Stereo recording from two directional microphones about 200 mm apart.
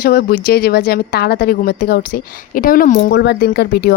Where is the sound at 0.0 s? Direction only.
50° left (ahead or behind).